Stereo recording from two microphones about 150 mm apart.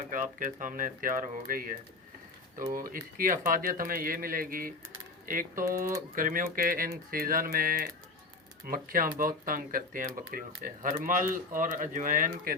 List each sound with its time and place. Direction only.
0.0 s speech: 60° right (ahead or behind)